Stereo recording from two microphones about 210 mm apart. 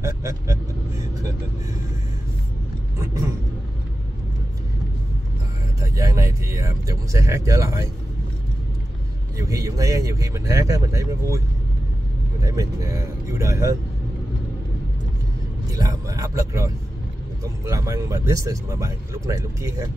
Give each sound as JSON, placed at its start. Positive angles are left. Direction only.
{"t": 0.0, "sound": "speech", "side_deg": -15}
{"t": 3.0, "sound": "speech", "side_deg": -15}
{"t": 5.8, "sound": "speech", "side_deg": -15}
{"t": 9.4, "sound": "speech", "side_deg": -15}
{"t": 15.7, "sound": "speech", "side_deg": -15}